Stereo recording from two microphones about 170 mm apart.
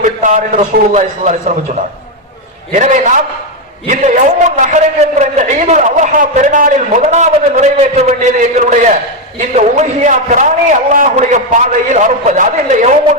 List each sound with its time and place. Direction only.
0.0 s a man's voice: 50° right (ahead or behind)
2.7 s a man's voice: 45° right (ahead or behind)